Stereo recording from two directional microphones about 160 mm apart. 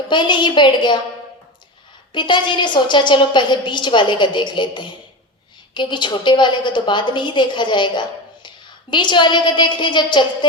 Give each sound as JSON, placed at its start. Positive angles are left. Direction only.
{"t": 0.1, "sound": "a woman's voice", "side_deg": 30}
{"t": 2.1, "sound": "a woman's voice", "side_deg": 30}